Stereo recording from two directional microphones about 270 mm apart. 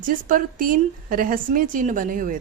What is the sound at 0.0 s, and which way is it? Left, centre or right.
Speech, right.